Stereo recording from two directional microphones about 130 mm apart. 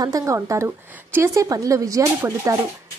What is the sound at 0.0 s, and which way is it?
Speech, 25° right (ahead or behind).